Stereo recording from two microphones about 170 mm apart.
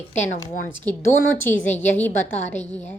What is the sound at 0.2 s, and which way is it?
Speech, 45° left (ahead or behind).